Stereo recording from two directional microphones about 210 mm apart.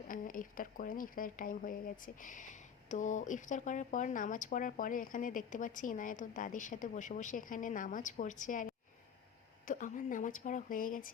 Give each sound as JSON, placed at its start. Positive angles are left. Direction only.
{"t": 0.1, "sound": "speech", "side_deg": 40}
{"t": 9.6, "sound": "speech", "side_deg": 40}